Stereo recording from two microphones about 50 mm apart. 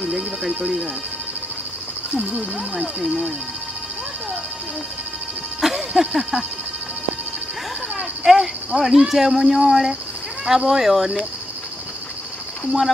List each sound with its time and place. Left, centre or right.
2.1 s speech: centre
3.0 s cricket: centre
5.6 s a sound: centre
8.2 s cricket: centre